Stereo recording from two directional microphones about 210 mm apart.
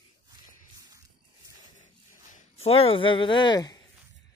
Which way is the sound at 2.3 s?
30° left (ahead or behind).